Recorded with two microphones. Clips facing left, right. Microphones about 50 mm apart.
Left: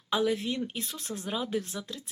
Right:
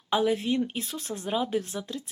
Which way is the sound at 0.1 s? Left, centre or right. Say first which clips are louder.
Right 3 dB; centre.